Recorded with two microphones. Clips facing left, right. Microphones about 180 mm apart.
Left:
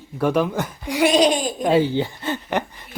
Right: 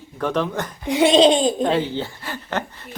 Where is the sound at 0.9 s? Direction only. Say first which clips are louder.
Right 3 dB; 25° right (ahead or behind).